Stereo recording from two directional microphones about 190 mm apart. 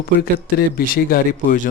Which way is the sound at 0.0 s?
55° left (ahead or behind).